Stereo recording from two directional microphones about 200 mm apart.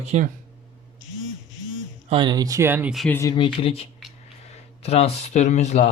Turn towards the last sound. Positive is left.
turn(degrees=35)  # may be behind; listen again after turning